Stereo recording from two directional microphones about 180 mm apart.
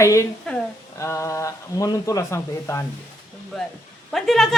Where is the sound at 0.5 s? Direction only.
5° left (ahead or behind).